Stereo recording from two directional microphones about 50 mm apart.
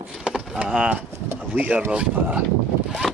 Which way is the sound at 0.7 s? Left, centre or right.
Centre.